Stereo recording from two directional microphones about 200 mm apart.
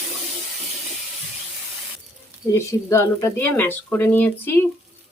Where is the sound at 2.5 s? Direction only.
15° left (ahead or behind).